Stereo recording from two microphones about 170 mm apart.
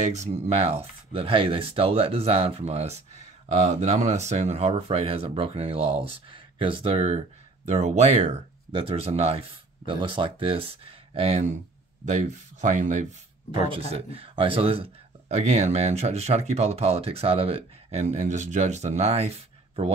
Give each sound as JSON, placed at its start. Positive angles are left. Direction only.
{"t": 0.0, "sound": "speech", "side_deg": -40}
{"t": 13.5, "sound": "speech", "side_deg": -30}